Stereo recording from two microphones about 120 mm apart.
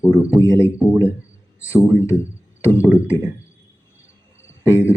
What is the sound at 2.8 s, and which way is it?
Speech, 15° right (ahead or behind).